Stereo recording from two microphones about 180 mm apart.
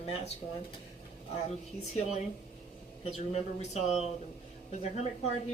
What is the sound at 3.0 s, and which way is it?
A woman's voice, 35° left (ahead or behind).